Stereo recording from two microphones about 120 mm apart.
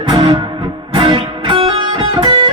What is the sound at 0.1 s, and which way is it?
Music, 45° right (ahead or behind).